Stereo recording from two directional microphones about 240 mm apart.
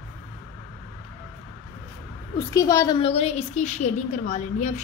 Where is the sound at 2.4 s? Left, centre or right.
Centre.